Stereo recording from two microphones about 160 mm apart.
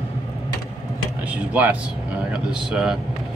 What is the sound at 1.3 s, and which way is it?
Speech, 10° right (ahead or behind).